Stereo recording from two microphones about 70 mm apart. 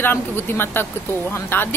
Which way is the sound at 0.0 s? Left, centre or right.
Left.